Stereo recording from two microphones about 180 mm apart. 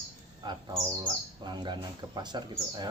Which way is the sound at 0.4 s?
15° right (ahead or behind).